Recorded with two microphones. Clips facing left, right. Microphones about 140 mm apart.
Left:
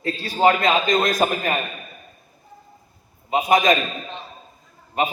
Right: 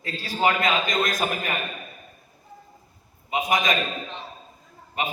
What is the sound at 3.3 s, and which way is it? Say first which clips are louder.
Speech: left 6 dB; 45° left (ahead or behind).